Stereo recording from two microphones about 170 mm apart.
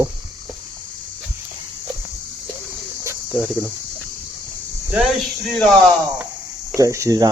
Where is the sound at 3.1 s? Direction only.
5° right (ahead or behind).